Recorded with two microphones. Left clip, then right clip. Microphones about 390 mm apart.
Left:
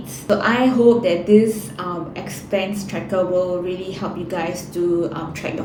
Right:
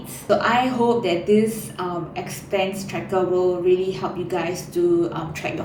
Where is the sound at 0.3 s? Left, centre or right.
Centre.